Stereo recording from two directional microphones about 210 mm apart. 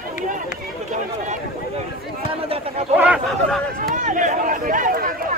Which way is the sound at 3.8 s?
40° right (ahead or behind).